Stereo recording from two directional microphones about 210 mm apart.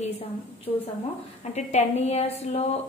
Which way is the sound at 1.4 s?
35° left (ahead or behind).